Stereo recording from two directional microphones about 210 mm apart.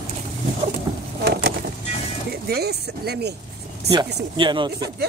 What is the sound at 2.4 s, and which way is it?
Speech, 50° right (ahead or behind).